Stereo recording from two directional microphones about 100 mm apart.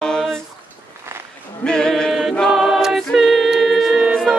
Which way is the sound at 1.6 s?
5° left (ahead or behind).